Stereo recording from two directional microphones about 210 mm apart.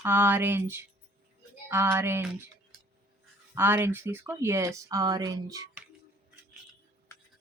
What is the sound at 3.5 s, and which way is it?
Speech, 10° right (ahead or behind).